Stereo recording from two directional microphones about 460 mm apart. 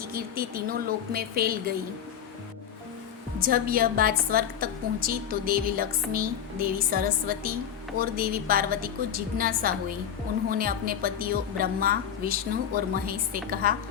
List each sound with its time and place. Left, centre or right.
0.0 s a woman's voice: centre
3.4 s a woman's voice: centre